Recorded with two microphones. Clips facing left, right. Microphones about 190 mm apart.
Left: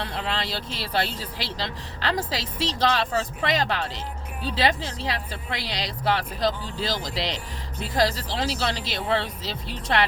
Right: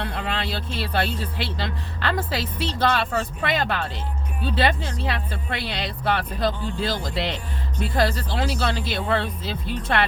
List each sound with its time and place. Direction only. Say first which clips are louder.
0.0 s speech: right 1 dB; 55° right (ahead or behind)